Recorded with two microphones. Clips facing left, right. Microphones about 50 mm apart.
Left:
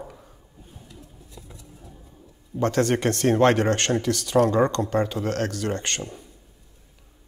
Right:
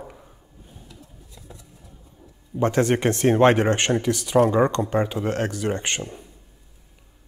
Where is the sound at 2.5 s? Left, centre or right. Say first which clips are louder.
Right 2 dB; centre.